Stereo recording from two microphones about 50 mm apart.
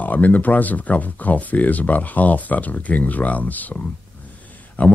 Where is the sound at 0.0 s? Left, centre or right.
Left.